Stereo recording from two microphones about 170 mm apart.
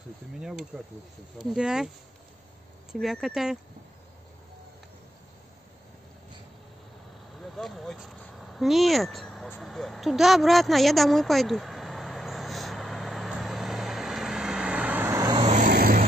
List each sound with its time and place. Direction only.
0.4 s speech: centre (ahead or behind)
2.9 s speech: centre (ahead or behind)
7.5 s speech: centre (ahead or behind)
9.6 s a sound: centre (ahead or behind); by 15.4 s 20° right (ahead or behind)
15.4 s vehicle: 45° right (ahead or behind)
15.7 s vehicle: 60° right (ahead or behind)